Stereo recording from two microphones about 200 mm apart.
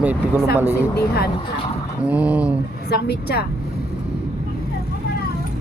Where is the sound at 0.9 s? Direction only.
50° left (ahead or behind).